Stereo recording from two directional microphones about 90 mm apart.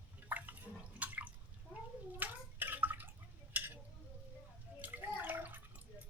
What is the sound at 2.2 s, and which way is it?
Bathtub, 20° right (ahead or behind).